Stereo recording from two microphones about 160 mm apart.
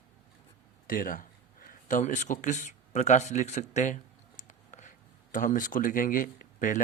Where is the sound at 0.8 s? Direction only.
60° left (ahead or behind).